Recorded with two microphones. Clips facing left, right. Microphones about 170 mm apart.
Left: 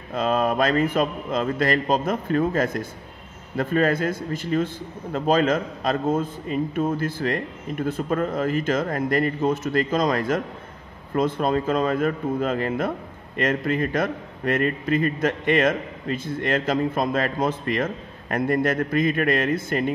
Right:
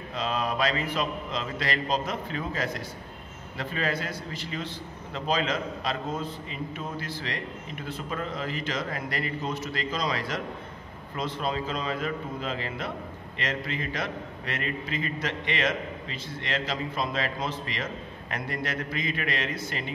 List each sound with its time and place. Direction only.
0.1 s a man's voice: 50° left (ahead or behind)